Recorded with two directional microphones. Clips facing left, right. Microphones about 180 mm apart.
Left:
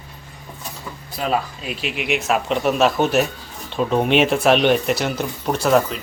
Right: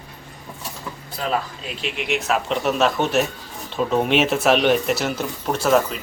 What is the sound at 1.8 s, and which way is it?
Speech, 5° left (ahead or behind).